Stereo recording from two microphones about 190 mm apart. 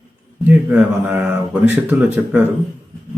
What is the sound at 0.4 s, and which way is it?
Speech, 10° right (ahead or behind).